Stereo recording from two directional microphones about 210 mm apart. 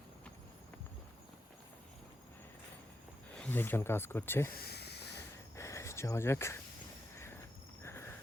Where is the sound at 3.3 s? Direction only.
5° left (ahead or behind).